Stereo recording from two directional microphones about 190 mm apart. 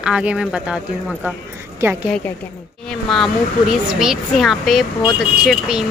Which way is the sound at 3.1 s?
Centre (ahead or behind).